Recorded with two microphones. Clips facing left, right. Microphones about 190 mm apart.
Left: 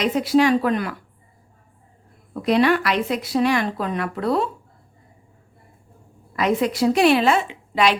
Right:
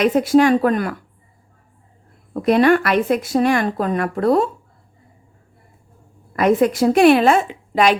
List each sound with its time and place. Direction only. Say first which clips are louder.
0.0 s speech: right 4 dB; 50° right (ahead or behind)
2.3 s speech: right 4 dB; 50° right (ahead or behind)
6.3 s speech: right 5 dB; 50° right (ahead or behind)